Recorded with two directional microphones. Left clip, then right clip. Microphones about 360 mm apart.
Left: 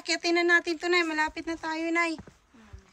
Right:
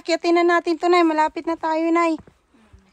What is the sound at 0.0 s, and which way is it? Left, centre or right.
Speech, centre.